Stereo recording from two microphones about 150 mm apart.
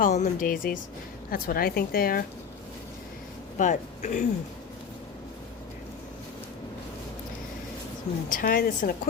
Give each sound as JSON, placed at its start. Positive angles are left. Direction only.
{"t": 0.0, "sound": "speech", "side_deg": 60}
{"t": 1.3, "sound": "a woman's voice", "side_deg": 80}
{"t": 3.6, "sound": "speech", "side_deg": 55}
{"t": 8.3, "sound": "speech", "side_deg": 65}